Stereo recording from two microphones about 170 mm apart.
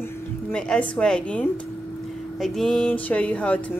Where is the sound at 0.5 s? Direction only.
5° left (ahead or behind).